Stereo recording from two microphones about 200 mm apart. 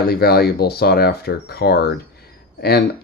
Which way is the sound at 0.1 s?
50° left (ahead or behind).